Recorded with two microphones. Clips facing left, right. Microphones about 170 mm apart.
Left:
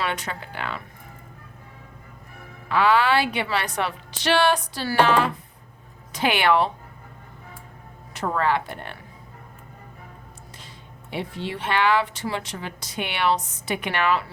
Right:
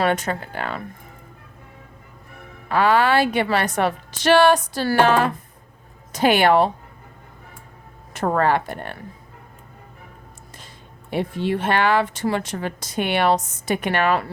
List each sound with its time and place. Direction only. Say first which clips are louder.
0.0 s speech: right 7 dB; 45° right (ahead or behind)
2.6 s speech: right 2 dB; 45° right (ahead or behind)
8.1 s speech: right 4 dB; 50° right (ahead or behind)
11.1 s speech: right 7 dB; 50° right (ahead or behind)